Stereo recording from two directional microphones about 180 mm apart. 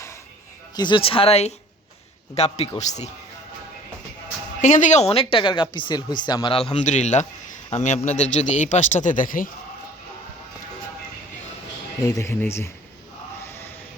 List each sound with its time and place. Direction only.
0.8 s speech: 25° left (ahead or behind)
4.6 s speech: 45° left (ahead or behind)
12.0 s speech: 15° left (ahead or behind)